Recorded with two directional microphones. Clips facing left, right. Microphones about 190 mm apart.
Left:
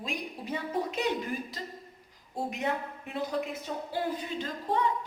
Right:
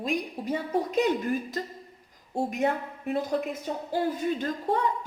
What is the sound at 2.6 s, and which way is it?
Speech, 45° right (ahead or behind).